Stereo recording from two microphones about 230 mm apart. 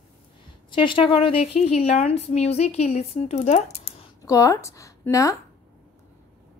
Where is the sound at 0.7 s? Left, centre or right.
Left.